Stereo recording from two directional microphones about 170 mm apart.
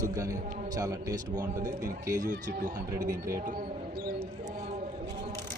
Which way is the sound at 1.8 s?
50° right (ahead or behind).